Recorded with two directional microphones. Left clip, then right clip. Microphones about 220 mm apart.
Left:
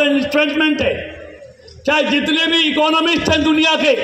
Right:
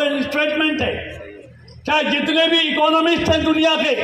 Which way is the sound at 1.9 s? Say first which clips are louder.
Left 3 dB; 50° left (ahead or behind).